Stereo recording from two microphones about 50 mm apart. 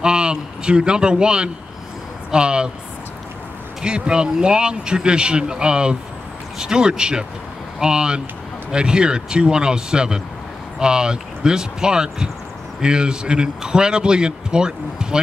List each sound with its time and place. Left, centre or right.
0.0 s a man's voice: centre
3.8 s speech: centre